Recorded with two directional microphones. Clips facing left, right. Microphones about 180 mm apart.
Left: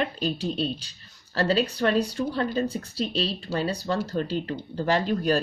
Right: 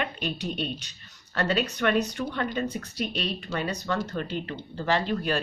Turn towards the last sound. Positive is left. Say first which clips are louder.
# left 3 dB
turn(degrees=40)  # may be behind; listen again after turning